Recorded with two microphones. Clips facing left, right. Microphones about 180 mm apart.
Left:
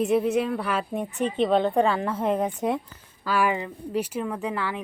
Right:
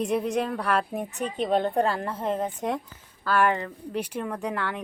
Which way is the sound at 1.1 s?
40° right (ahead or behind).